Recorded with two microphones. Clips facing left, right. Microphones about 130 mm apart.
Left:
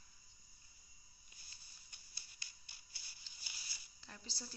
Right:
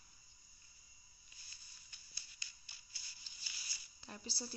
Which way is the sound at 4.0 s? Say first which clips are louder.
Right 5 dB; 15° right (ahead or behind).